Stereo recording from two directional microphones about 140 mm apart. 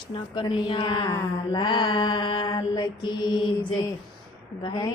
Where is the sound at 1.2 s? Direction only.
35° left (ahead or behind).